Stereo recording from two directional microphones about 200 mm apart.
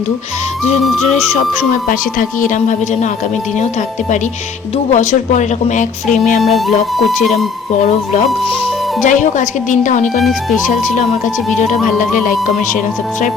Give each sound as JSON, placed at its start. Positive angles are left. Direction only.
{"t": 1.9, "sound": "speech", "side_deg": 40}
{"t": 4.9, "sound": "speech", "side_deg": 35}
{"t": 6.4, "sound": "speech", "side_deg": 0}
{"t": 9.0, "sound": "speech", "side_deg": 40}
{"t": 10.2, "sound": "speech", "side_deg": 0}
{"t": 11.5, "sound": "speech", "side_deg": 35}